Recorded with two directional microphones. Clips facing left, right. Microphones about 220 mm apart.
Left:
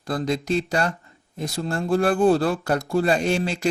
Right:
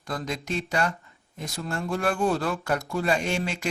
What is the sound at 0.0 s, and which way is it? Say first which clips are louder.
Speech: left 7 dB; 35° left (ahead or behind).